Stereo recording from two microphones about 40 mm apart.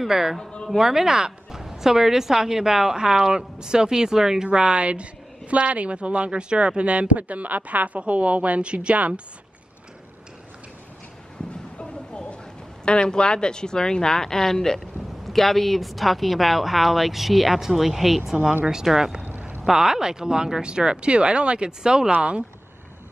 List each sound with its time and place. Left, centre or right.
0.0 s speech: centre
0.4 s a woman's voice: left
0.7 s speech: centre
4.5 s speech: right
11.8 s a sound: left
12.8 s speech: left; by 22.4 s right